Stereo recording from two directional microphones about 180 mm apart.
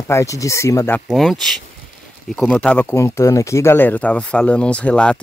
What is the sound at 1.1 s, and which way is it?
Speech, centre (ahead or behind).